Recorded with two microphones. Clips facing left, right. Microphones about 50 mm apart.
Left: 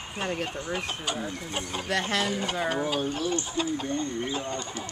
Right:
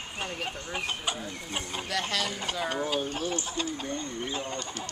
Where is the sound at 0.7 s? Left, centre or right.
Centre.